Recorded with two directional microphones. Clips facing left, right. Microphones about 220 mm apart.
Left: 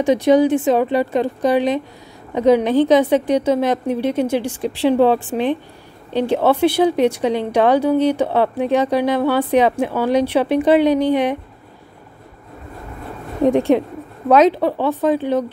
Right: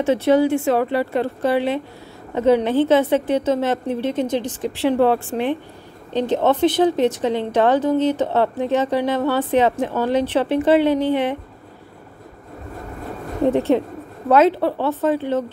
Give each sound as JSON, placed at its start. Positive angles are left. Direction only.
{"t": 0.0, "sound": "a woman's voice", "side_deg": 15}
{"t": 13.4, "sound": "a woman's voice", "side_deg": 15}